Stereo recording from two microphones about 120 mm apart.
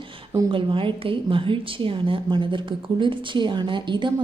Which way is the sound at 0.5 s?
45° right (ahead or behind).